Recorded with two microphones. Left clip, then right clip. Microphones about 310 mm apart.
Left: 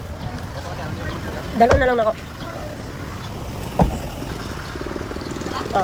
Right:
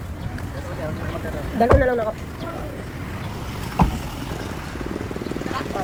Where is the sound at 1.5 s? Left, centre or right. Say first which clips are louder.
Left 2 dB; left.